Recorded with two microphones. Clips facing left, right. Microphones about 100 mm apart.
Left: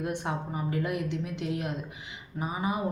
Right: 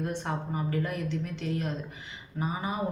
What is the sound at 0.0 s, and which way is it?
Speech, 10° left (ahead or behind).